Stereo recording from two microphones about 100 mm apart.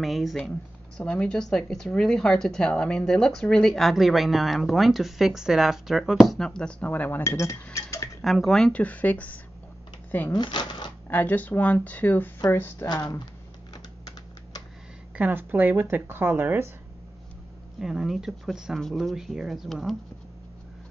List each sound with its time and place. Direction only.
0.0 s speech: centre (ahead or behind); by 7.5 s 30° left (ahead or behind)
7.7 s cutlery: 30° left (ahead or behind)
8.2 s speech: centre (ahead or behind)
10.3 s speech: 50° left (ahead or behind)
11.1 s speech: 20° left (ahead or behind)
12.8 s speech: 40° left (ahead or behind)
15.1 s speech: 15° right (ahead or behind)
17.7 s speech: 5° right (ahead or behind)